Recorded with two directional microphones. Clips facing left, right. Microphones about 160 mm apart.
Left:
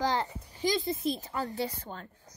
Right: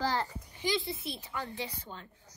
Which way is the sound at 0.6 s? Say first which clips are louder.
Left 4 dB; 40° left (ahead or behind).